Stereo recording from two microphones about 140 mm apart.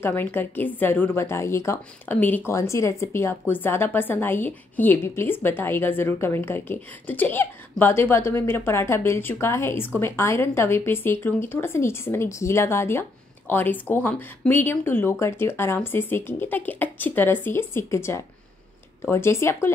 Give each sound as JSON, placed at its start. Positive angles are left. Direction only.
{"t": 0.0, "sound": "a woman's voice", "side_deg": 15}